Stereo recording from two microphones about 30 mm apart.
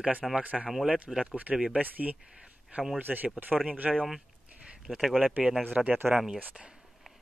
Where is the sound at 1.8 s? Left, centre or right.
Right.